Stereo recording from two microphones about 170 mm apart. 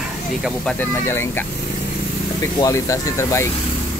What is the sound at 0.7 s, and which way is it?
Speech, 15° left (ahead or behind).